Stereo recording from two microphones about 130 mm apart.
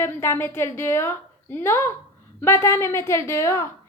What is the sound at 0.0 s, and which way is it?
A woman's voice, 20° left (ahead or behind).